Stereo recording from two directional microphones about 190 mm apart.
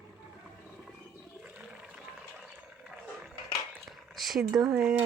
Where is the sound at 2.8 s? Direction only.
5° right (ahead or behind).